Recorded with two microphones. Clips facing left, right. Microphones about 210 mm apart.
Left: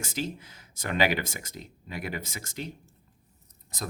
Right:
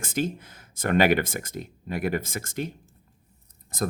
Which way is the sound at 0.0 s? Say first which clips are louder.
Right 5 dB; 50° right (ahead or behind).